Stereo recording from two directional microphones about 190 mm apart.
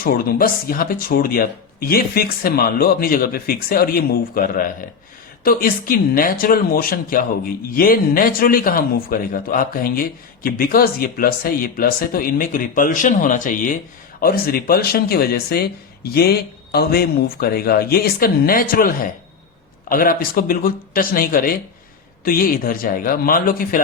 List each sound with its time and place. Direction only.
0.0 s speech: 50° left (ahead or behind)